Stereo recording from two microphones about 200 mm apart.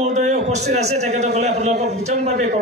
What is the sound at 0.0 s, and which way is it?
A man's voice, 35° right (ahead or behind).